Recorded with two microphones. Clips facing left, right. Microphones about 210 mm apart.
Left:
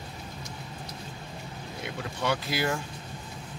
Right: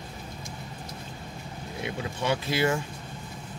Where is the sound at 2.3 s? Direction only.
20° right (ahead or behind).